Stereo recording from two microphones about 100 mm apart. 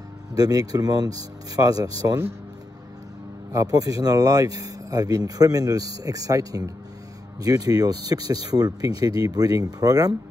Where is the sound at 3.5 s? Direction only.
35° right (ahead or behind).